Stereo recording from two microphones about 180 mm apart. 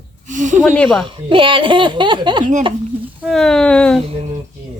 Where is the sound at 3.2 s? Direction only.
Centre (ahead or behind).